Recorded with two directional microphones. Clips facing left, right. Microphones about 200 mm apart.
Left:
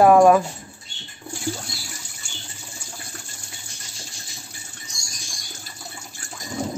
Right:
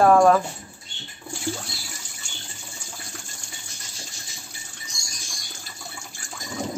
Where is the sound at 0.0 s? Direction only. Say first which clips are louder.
Left 3 dB; 15° left (ahead or behind).